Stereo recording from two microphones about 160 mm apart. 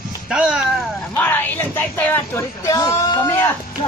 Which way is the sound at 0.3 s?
5° right (ahead or behind).